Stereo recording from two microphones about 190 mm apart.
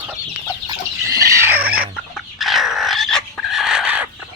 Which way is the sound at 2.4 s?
Centre (ahead or behind).